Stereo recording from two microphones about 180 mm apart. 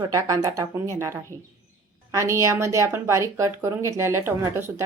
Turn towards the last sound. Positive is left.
turn(degrees=-15)  # may be behind; listen again after turning